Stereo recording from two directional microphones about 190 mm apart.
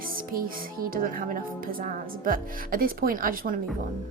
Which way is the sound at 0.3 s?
50° right (ahead or behind).